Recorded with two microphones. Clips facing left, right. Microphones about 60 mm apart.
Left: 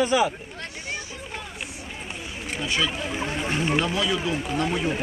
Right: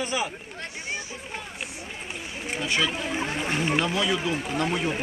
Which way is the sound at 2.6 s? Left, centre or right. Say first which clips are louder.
Even; right.